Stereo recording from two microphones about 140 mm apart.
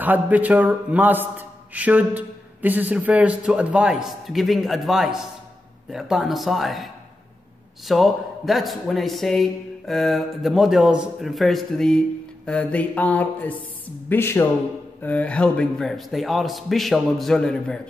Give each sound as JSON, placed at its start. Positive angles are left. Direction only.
{"t": 0.0, "sound": "a man's voice", "side_deg": -10}
{"t": 12.4, "sound": "a sound", "side_deg": 10}
{"t": 15.0, "sound": "a man's voice", "side_deg": 10}